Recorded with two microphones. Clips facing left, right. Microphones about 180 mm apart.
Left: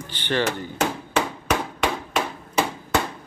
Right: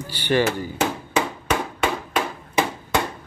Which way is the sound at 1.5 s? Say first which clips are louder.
Right 1 dB; 10° right (ahead or behind).